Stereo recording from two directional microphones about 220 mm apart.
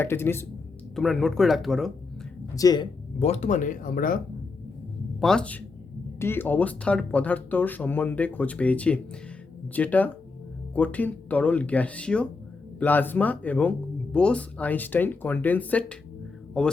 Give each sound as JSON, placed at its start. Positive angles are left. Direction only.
{"t": 0.0, "sound": "speech", "side_deg": 10}
{"t": 2.6, "sound": "speech", "side_deg": 15}
{"t": 3.2, "sound": "speech", "side_deg": 30}
{"t": 5.2, "sound": "speech", "side_deg": 5}